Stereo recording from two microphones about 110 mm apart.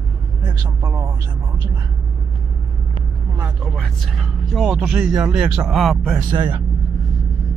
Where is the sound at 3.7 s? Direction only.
Centre (ahead or behind).